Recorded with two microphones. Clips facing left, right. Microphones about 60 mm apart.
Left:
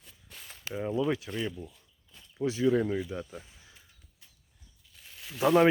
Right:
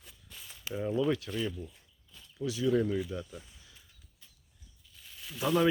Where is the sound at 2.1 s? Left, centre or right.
Left.